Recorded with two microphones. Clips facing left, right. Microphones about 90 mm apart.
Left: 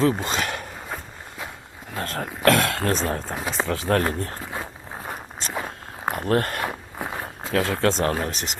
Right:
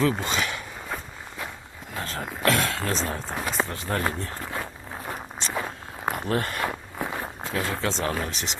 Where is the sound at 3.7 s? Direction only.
80° left.